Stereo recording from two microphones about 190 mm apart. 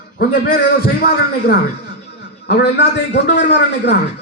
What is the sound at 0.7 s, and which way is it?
A man's voice, 55° left (ahead or behind).